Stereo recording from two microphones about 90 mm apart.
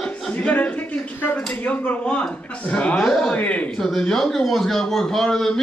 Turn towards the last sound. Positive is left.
turn(degrees=5)  # may be behind; listen again after turning